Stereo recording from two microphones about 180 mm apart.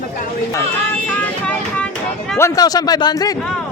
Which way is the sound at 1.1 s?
10° left (ahead or behind).